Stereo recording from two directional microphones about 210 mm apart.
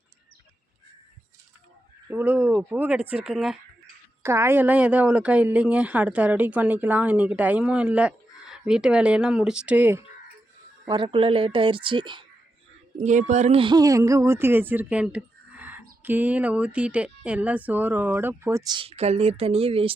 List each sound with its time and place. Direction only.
2.0 s speech: 10° right (ahead or behind)
10.8 s a woman's voice: 25° right (ahead or behind)
13.0 s speech: 35° right (ahead or behind)